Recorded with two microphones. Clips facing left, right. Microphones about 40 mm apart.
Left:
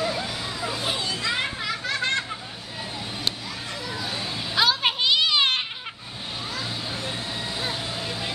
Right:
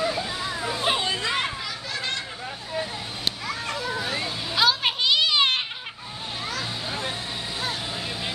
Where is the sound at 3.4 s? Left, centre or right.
Right.